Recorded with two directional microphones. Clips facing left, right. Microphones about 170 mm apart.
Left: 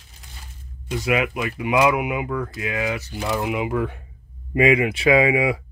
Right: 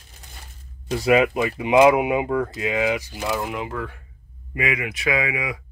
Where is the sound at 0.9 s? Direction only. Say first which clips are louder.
Right 4 dB; 35° right (ahead or behind); by 5.6 s 25° left (ahead or behind).